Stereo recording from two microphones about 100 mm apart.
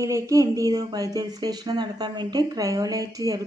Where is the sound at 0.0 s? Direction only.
35° right (ahead or behind).